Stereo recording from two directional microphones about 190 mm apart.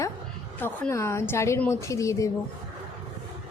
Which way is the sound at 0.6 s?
15° left (ahead or behind).